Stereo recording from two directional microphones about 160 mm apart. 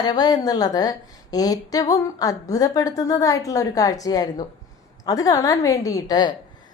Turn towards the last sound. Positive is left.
turn(degrees=25)  # may be behind; listen again after turning